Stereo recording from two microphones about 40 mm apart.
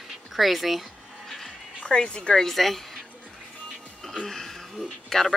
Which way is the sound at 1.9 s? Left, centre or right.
Left.